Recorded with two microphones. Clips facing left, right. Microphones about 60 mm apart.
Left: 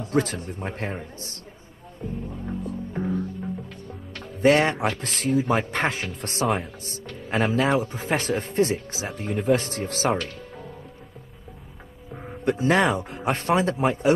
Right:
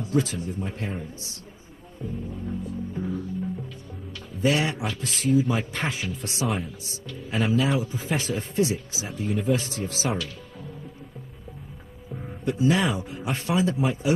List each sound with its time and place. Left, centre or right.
0.0 s speech: left
2.6 s music: left
4.1 s speech: left
12.4 s speech: left